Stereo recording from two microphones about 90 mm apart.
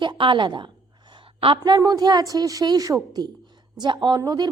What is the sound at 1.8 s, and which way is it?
A woman's voice, 45° right (ahead or behind).